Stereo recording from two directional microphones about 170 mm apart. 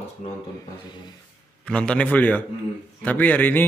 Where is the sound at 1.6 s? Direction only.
5° left (ahead or behind).